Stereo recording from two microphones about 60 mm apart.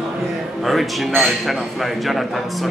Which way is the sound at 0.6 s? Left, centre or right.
Centre.